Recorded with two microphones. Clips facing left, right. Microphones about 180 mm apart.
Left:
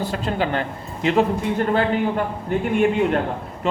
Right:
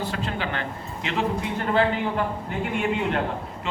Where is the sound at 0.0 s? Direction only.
40° left (ahead or behind).